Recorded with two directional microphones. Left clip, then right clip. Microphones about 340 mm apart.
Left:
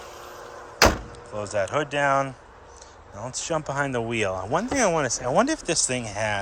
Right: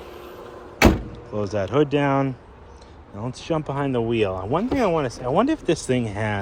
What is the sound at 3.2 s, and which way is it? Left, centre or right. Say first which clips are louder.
Speech: right 2 dB; left.